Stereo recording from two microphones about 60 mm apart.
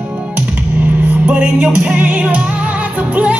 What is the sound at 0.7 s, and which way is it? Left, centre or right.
Music, right.